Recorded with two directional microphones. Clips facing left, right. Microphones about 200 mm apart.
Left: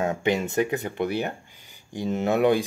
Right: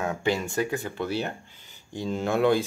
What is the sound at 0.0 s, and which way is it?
Speech, 20° left (ahead or behind).